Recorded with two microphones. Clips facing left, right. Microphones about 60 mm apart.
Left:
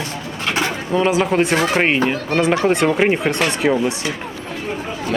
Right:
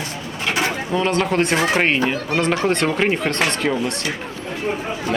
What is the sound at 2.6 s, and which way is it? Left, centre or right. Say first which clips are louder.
Speech: left 3 dB; centre.